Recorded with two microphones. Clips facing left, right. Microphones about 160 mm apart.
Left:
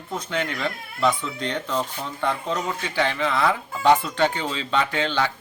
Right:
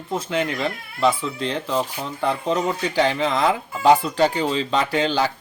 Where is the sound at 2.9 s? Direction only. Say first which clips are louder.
Right 3 dB; 40° right (ahead or behind).